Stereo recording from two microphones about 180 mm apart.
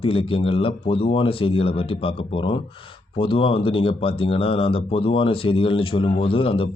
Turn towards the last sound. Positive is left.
turn(degrees=30)  # may be behind; listen again after turning